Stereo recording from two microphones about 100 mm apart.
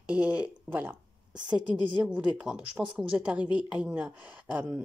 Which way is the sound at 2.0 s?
10° right (ahead or behind).